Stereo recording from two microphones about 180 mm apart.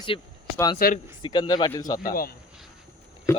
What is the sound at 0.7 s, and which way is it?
Speech, 55° left (ahead or behind).